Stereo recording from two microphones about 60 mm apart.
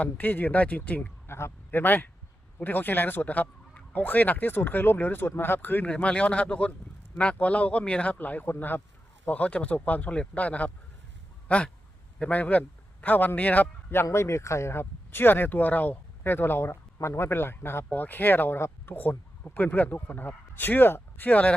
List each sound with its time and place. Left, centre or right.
0.0 s a man's voice: left
1.3 s a sound: left
1.8 s speech: left
5.9 s a man's voice: centre
8.2 s a man's voice: left
13.9 s speech: left